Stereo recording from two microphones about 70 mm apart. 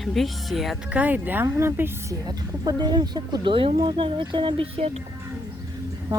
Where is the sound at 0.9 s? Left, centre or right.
Right.